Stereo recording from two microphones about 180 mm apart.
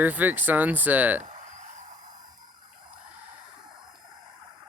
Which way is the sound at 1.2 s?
45° right (ahead or behind).